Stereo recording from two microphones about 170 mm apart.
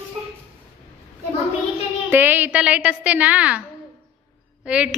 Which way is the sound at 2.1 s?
10° right (ahead or behind).